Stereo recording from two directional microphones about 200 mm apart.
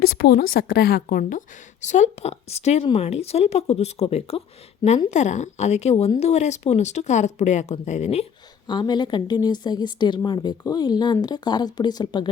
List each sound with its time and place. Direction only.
0.0 s a woman's voice: 50° left (ahead or behind); by 12.3 s 20° left (ahead or behind)